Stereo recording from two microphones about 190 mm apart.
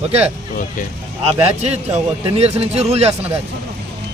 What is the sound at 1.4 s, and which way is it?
Speech, 35° right (ahead or behind).